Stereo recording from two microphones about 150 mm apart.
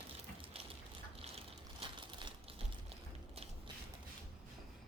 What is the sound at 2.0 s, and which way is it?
Typewriter, 30° right (ahead or behind).